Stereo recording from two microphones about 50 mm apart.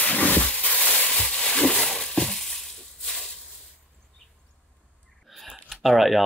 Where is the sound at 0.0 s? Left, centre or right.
Left; by 2.0 s centre.